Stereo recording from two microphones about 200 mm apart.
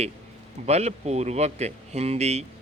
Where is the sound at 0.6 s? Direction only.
30° right (ahead or behind).